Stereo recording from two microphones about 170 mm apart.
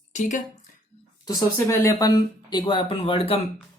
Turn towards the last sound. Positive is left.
turn(degrees=35)  # may be behind; listen again after turning